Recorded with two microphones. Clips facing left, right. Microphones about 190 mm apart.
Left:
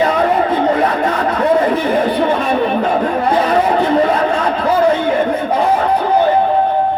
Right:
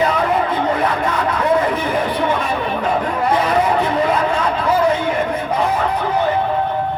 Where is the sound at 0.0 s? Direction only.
45° left (ahead or behind).